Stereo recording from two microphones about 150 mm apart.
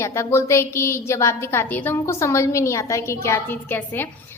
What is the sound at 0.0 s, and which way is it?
A woman's voice, 20° left (ahead or behind).